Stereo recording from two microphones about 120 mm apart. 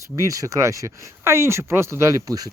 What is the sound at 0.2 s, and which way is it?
Speech, 30° right (ahead or behind).